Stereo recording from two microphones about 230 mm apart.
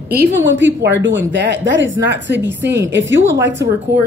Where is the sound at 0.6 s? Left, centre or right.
Right.